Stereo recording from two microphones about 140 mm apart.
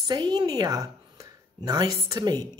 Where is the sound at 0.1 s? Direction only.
30° right (ahead or behind).